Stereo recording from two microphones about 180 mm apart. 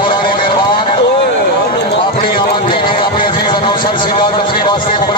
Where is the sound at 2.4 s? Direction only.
25° left (ahead or behind).